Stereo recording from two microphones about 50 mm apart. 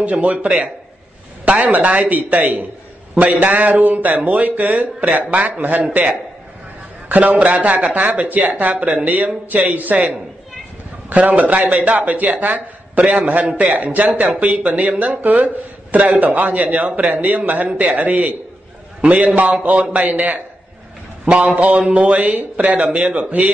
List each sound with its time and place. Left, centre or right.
0.0 s a man's voice: right
7.1 s a man's voice: right